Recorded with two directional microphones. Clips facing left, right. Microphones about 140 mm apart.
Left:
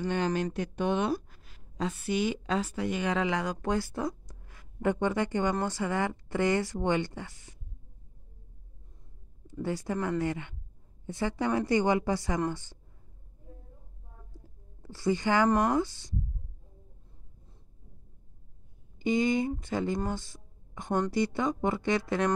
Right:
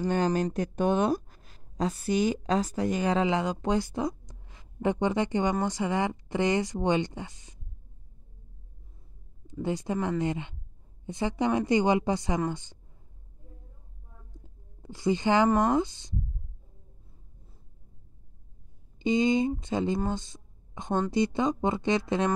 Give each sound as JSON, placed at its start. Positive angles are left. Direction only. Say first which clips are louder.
{"t": 0.0, "sound": "speech", "louder": "right 3 dB", "side_deg": -40}
{"t": 3.6, "sound": "a sound", "louder": "right 3 dB", "side_deg": -20}
{"t": 4.8, "sound": "speech", "louder": "right 2 dB", "side_deg": -20}
{"t": 9.5, "sound": "a woman's voice", "louder": "right 2 dB", "side_deg": -20}
{"t": 14.3, "sound": "a sound", "louder": "even", "side_deg": -20}
{"t": 15.6, "sound": "speech", "louder": "right 2 dB", "side_deg": -20}
{"t": 18.9, "sound": "speech", "louder": "right 2 dB", "side_deg": -20}
{"t": 20.1, "sound": "a sound", "louder": "right 2 dB", "side_deg": -20}
{"t": 21.1, "sound": "speech", "louder": "right 3 dB", "side_deg": -20}